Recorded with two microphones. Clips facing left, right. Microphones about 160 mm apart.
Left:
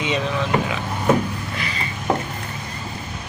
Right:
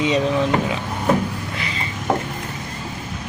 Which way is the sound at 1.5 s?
25° right (ahead or behind).